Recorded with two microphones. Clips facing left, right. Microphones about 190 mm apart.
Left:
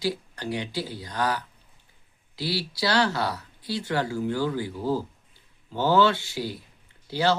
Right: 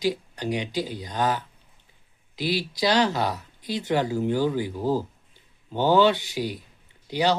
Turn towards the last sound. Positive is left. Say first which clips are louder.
# right 1 dB
turn(degrees=-15)  # may be behind; listen again after turning